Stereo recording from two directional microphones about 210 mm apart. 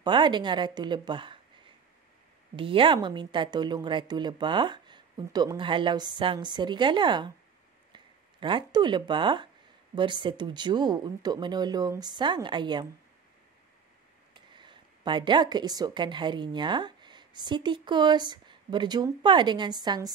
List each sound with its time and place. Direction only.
0.0 s speech: 20° right (ahead or behind)
2.5 s speech: 25° right (ahead or behind)
14.5 s a woman's voice: 20° right (ahead or behind)